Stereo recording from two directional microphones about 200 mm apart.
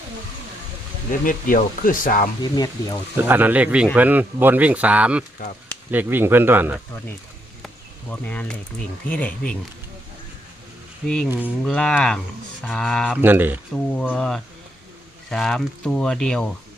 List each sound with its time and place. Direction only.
1.2 s speech: 45° left (ahead or behind)
2.4 s speech: 20° left (ahead or behind)
3.2 s speech: 10° right (ahead or behind)
8.1 s speech: 5° left (ahead or behind)
11.4 s speech: 5° left (ahead or behind)
13.2 s speech: 10° right (ahead or behind)
13.7 s speech: 5° left (ahead or behind)